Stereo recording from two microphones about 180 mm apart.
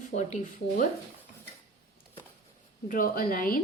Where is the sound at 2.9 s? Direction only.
50° left (ahead or behind).